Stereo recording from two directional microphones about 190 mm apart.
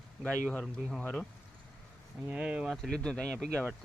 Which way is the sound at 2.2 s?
5° right (ahead or behind).